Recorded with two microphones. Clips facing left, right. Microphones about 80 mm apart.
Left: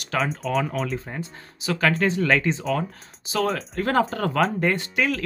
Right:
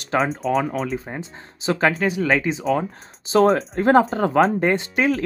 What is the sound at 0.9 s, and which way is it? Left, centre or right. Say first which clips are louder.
Speech: right 2 dB; centre.